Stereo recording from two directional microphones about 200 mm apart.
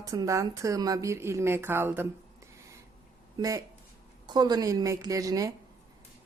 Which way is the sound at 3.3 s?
20° right (ahead or behind).